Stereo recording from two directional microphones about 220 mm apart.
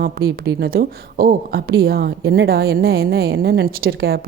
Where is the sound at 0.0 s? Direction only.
45° right (ahead or behind).